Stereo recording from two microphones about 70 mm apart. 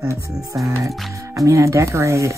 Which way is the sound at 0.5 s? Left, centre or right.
Right.